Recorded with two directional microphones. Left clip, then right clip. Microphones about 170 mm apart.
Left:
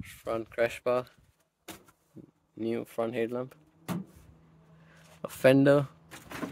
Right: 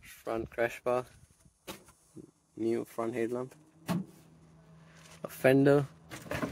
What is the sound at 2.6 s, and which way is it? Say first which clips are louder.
Speech: left 1 dB; 30° left (ahead or behind).